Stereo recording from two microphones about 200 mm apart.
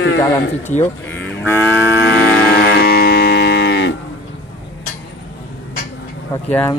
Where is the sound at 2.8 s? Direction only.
50° left (ahead or behind).